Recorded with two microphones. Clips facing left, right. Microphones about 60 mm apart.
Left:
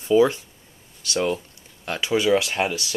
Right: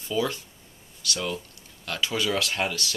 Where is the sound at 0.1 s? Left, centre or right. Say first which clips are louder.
Left 10 dB; left.